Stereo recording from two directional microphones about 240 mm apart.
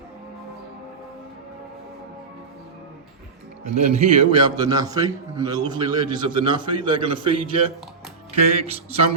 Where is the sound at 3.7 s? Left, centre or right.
Right.